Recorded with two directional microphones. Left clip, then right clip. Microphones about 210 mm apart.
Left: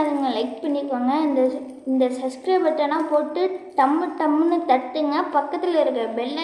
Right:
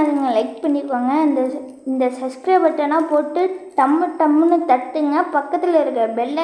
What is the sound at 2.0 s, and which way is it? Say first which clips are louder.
A woman's voice: right 2 dB; 30° right (ahead or behind).